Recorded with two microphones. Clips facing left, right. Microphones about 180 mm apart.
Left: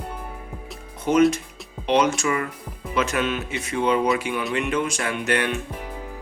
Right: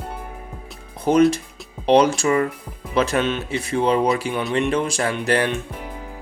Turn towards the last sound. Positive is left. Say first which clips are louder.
# right 3 dB
turn(degrees=-35)  # may be behind; listen again after turning